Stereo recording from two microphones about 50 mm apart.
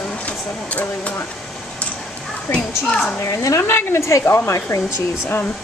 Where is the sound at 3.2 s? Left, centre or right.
Left.